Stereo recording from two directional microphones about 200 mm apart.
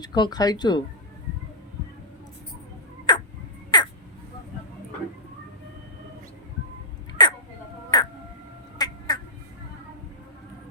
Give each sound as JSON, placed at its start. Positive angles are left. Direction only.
{"t": 0.0, "sound": "speech", "side_deg": 20}
{"t": 3.1, "sound": "a sound", "side_deg": 20}
{"t": 3.7, "sound": "crow", "side_deg": 20}
{"t": 7.2, "sound": "hiccup", "side_deg": 20}
{"t": 7.9, "sound": "crow", "side_deg": 20}
{"t": 8.8, "sound": "quack", "side_deg": 20}